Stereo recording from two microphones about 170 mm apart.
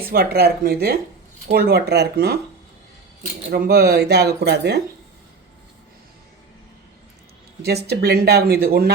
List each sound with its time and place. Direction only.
0.0 s speech: 65° right (ahead or behind)
3.5 s speech: 65° right (ahead or behind)
7.9 s speech: 70° right (ahead or behind)